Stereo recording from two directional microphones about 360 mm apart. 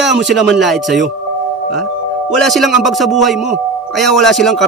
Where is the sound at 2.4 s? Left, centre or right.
Centre.